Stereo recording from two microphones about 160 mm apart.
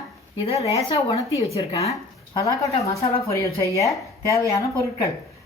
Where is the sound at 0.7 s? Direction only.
40° left (ahead or behind).